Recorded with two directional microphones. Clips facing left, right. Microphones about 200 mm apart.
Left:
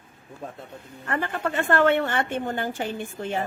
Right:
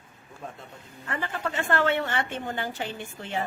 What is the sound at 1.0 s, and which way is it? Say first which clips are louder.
A woman's voice: left 4 dB; 55° left (ahead or behind).